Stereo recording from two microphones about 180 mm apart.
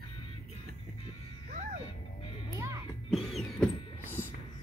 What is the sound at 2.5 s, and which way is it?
Music, 15° right (ahead or behind).